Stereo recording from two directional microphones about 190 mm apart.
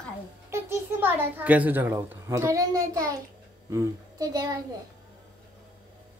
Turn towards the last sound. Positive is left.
turn(degrees=-20)  # may be behind; listen again after turning